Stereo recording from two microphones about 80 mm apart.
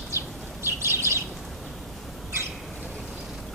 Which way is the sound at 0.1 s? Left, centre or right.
Right.